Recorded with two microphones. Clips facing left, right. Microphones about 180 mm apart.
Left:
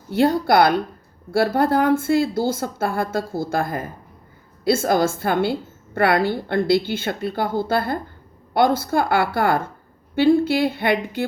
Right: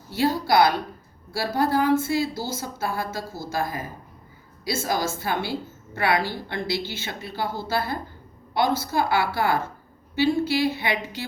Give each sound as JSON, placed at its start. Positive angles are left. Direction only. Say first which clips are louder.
{"t": 0.1, "sound": "a woman's voice", "louder": "left 5 dB", "side_deg": 55}